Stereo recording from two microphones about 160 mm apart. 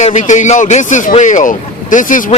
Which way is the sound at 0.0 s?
50° left (ahead or behind).